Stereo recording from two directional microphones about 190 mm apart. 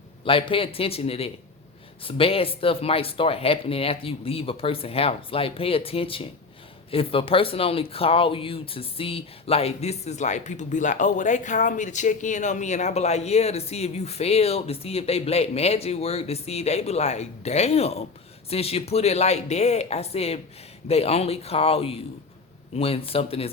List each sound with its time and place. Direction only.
0.3 s speech: 30° left (ahead or behind)